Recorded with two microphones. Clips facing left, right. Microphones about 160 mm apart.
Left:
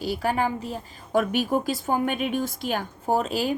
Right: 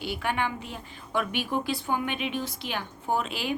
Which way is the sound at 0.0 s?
40° left (ahead or behind).